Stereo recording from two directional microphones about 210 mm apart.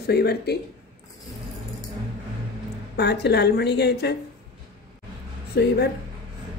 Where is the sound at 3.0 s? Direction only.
50° left (ahead or behind).